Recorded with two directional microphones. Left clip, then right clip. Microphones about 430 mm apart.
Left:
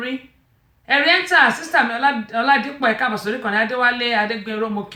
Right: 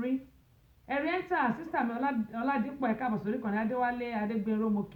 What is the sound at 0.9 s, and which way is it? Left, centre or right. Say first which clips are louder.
A woman's voice: left 16 dB; centre.